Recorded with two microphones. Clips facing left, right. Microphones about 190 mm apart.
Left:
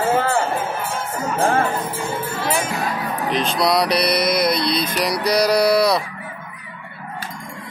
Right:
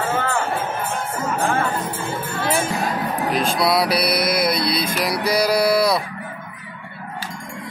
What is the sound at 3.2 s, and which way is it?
Speech, 5° right (ahead or behind).